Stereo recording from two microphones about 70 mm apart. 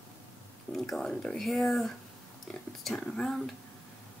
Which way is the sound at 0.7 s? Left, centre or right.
Centre.